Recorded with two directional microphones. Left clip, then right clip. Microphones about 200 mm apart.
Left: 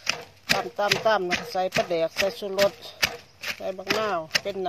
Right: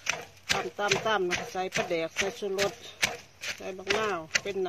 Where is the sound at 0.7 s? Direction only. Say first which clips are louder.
Left 5 dB; 45° left (ahead or behind).